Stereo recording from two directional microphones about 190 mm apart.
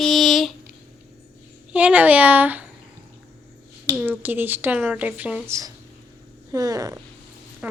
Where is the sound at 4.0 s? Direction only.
10° right (ahead or behind).